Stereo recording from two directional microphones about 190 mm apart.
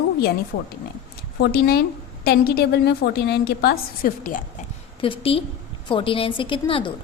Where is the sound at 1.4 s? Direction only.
55° left (ahead or behind).